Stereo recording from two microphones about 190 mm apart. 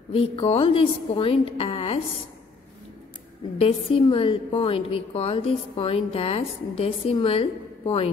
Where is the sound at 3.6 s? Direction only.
30° left (ahead or behind).